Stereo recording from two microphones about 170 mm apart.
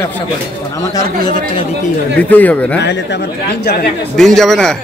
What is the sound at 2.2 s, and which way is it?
Speech, 10° left (ahead or behind).